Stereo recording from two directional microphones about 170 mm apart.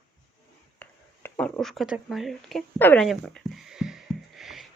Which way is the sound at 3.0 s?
Centre (ahead or behind).